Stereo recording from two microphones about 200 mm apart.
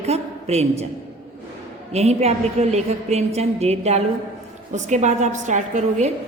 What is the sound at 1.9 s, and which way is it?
A woman's voice, 30° right (ahead or behind).